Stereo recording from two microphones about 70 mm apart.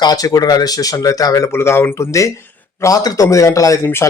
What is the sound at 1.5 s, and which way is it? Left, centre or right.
Speech, left.